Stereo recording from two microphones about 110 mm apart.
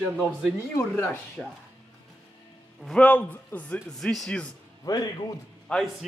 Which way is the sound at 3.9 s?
5° left (ahead or behind).